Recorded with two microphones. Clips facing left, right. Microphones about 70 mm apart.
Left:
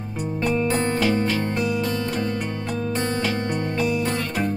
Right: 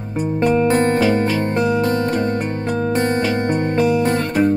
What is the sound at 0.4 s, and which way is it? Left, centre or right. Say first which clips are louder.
Music: right 7 dB; right.